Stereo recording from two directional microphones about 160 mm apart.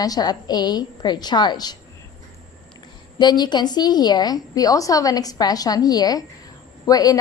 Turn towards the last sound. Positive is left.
turn(degrees=20)  # may be behind; listen again after turning